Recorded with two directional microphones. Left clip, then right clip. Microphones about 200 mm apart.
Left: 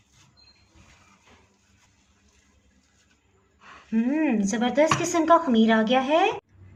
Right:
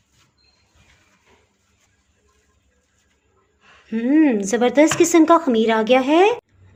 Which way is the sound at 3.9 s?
40° right (ahead or behind).